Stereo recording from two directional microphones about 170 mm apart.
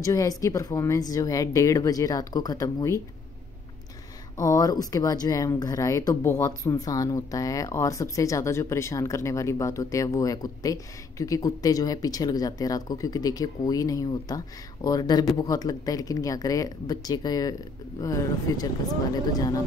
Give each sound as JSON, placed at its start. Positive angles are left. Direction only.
{"t": 0.0, "sound": "speech", "side_deg": 20}
{"t": 4.4, "sound": "speech", "side_deg": 20}